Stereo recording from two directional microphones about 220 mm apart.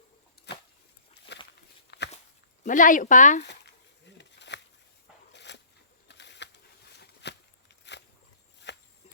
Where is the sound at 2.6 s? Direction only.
35° left (ahead or behind).